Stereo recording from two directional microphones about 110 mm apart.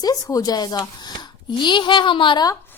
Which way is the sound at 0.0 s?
35° left (ahead or behind).